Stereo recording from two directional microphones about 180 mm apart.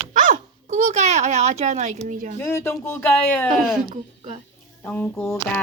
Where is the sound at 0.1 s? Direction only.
45° right (ahead or behind).